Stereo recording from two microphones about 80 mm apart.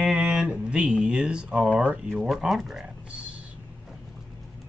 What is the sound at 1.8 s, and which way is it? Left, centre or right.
Speech, centre.